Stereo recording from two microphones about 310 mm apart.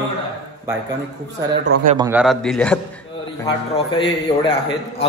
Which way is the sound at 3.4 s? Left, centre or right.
Centre.